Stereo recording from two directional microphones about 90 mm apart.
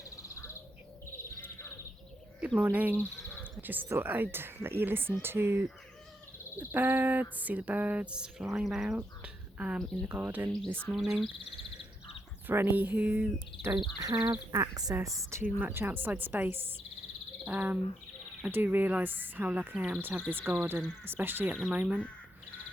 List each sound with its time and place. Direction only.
0.0 s crow: 35° left (ahead or behind)
1.2 s bird: 30° left (ahead or behind)
2.6 s speech: 20° right (ahead or behind)
3.2 s a sound: 20° left (ahead or behind)
3.6 s speech: 20° right (ahead or behind)
9.0 s a sound: 15° right (ahead or behind)
9.7 s speech: 5° left (ahead or behind)
10.2 s speech: 20° right (ahead or behind)
10.8 s speech: 5° right (ahead or behind)
12.5 s speech: 25° right (ahead or behind)
13.7 s speech: 50° right (ahead or behind); by 15.4 s 35° right (ahead or behind)
15.4 s speech: 15° right (ahead or behind)
15.7 s speech: 25° right (ahead or behind)